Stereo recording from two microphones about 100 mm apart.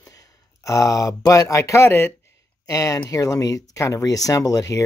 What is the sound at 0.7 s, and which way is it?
Speech, 35° left (ahead or behind).